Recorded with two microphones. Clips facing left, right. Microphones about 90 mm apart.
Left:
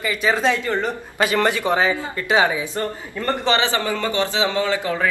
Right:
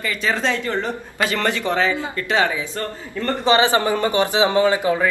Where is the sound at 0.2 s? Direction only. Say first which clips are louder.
Left 3 dB; 15° left (ahead or behind).